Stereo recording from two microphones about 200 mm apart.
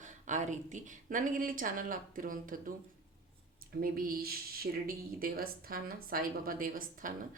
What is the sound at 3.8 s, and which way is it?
A woman's voice, 45° right (ahead or behind).